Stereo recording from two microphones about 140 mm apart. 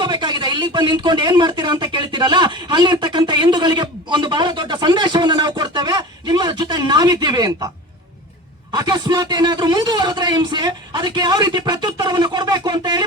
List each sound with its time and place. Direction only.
0.0 s speech: 30° right (ahead or behind)
8.7 s speech: 30° right (ahead or behind)